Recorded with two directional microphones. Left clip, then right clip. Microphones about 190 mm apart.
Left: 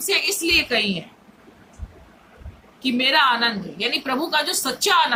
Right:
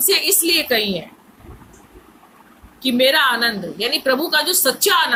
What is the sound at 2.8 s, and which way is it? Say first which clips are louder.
A woman's voice: right 3 dB; 10° left (ahead or behind).